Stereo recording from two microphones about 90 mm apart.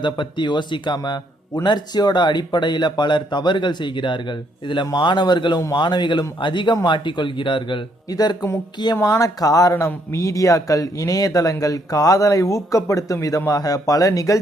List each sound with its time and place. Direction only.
0.0 s speech: 60° left (ahead or behind)
8.1 s speech: 45° left (ahead or behind)